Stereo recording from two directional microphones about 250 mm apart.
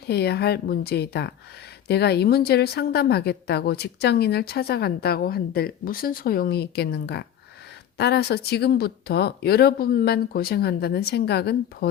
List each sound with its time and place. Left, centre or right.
0.1 s a woman's voice: left